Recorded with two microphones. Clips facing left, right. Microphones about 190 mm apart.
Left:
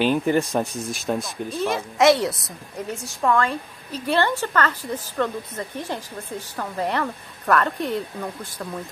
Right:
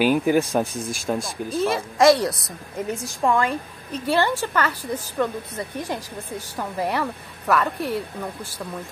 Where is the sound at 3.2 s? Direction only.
20° right (ahead or behind).